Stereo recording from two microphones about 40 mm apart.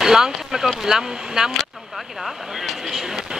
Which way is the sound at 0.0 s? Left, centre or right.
Centre.